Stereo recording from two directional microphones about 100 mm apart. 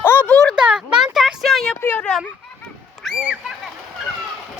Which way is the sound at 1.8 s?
20° left (ahead or behind).